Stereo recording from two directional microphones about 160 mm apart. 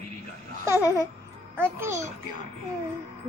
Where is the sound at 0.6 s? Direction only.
15° right (ahead or behind).